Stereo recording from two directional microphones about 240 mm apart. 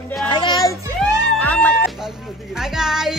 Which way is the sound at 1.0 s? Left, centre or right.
Centre.